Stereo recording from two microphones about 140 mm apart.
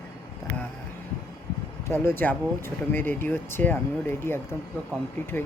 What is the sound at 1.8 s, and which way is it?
Speech, 15° left (ahead or behind).